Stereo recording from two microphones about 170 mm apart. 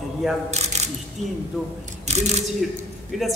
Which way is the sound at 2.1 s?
40° right (ahead or behind).